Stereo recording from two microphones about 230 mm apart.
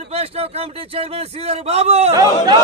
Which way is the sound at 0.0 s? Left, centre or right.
Right.